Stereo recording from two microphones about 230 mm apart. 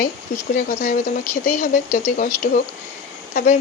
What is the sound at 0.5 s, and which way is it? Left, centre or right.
Speech, left.